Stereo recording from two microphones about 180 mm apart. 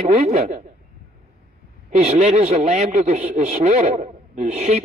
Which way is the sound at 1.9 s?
40° right (ahead or behind).